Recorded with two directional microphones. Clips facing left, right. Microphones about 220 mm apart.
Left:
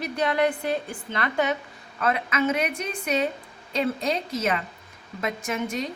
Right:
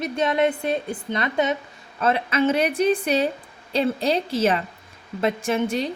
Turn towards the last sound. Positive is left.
turn(degrees=-30)  # may be behind; listen again after turning